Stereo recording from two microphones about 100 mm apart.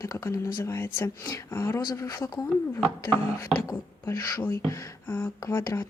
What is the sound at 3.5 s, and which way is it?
Speech, 35° left (ahead or behind).